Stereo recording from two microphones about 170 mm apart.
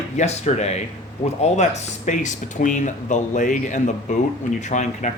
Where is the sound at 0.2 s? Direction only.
40° left (ahead or behind).